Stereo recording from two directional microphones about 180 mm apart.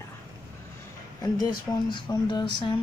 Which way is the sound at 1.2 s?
20° left (ahead or behind).